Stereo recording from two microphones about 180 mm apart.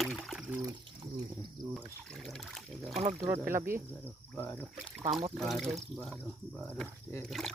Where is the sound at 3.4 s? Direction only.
15° right (ahead or behind).